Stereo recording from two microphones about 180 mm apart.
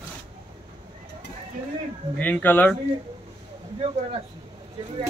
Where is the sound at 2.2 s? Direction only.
10° left (ahead or behind).